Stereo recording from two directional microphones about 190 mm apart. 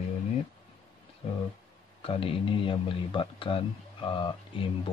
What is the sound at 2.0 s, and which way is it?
Speech, 30° left (ahead or behind).